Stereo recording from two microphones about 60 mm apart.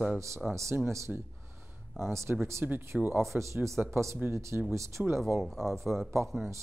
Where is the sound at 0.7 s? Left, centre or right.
Right.